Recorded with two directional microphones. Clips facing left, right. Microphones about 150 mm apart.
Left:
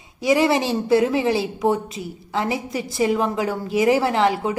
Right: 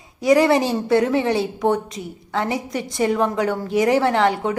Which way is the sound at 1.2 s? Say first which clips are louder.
Even; 5° left (ahead or behind).